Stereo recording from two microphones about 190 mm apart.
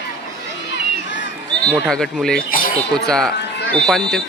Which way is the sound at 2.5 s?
45° left (ahead or behind).